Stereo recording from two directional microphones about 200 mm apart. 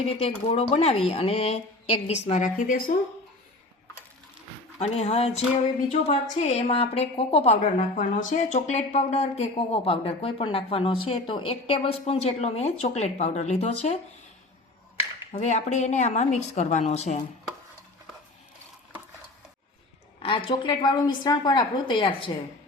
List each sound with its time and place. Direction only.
0.0 s a woman's voice: 30° left (ahead or behind)
4.8 s a woman's voice: 35° left (ahead or behind)
15.3 s a woman's voice: 35° left (ahead or behind)
20.1 s a woman's voice: 25° left (ahead or behind)